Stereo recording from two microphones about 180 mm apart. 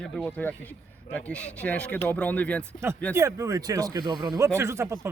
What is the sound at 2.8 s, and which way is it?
Speech, 15° right (ahead or behind).